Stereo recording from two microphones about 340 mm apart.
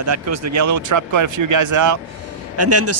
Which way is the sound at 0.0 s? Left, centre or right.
Right.